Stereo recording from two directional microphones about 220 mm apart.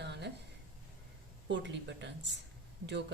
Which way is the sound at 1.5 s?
55° right (ahead or behind).